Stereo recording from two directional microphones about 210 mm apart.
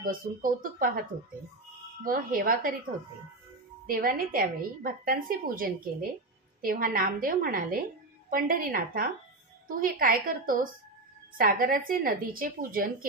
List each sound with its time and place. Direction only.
0.0 s speech: 40° right (ahead or behind)
2.0 s a woman's voice: 40° right (ahead or behind)
3.8 s a woman's voice: 45° right (ahead or behind)